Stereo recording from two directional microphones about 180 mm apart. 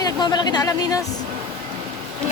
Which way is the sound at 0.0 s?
25° left (ahead or behind).